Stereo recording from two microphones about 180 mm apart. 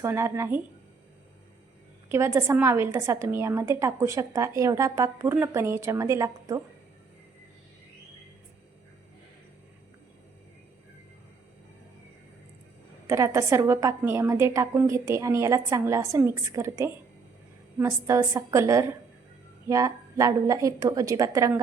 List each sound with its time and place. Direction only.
0.0 s a woman's voice: 15° right (ahead or behind)
2.0 s a woman's voice: 15° right (ahead or behind)
13.1 s a woman's voice: 15° right (ahead or behind)